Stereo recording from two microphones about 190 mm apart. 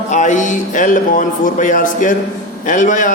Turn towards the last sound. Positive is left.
turn(degrees=40)  # may be behind; listen again after turning